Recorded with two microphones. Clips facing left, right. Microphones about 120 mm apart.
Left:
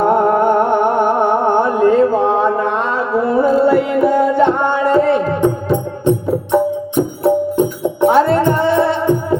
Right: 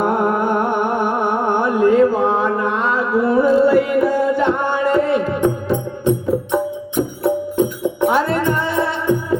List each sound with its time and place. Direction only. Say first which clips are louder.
0.0 s music: left 5 dB; 25° left (ahead or behind)